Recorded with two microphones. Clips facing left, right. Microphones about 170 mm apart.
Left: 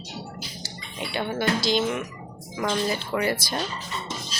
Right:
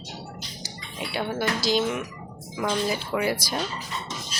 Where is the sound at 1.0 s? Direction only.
5° right (ahead or behind).